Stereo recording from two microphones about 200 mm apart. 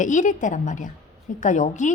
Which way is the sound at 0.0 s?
40° left (ahead or behind).